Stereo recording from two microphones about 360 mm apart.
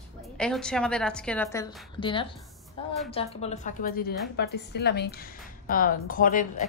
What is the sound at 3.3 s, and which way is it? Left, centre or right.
A woman's voice, centre.